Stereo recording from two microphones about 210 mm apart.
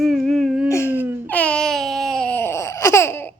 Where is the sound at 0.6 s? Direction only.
15° left (ahead or behind).